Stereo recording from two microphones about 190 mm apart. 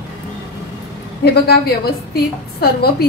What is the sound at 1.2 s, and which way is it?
A woman's voice, 55° left (ahead or behind).